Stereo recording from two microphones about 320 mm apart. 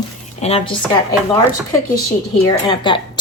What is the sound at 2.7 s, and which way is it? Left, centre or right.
Speech, centre.